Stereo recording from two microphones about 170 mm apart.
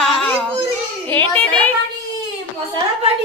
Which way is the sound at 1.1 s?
10° left (ahead or behind).